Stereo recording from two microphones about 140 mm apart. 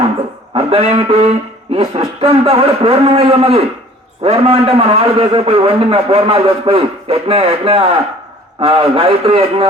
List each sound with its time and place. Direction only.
0.5 s a man's voice: 45° right (ahead or behind)